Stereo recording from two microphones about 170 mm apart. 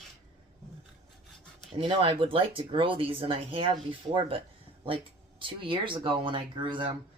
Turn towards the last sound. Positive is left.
turn(degrees=-30)  # may be behind; listen again after turning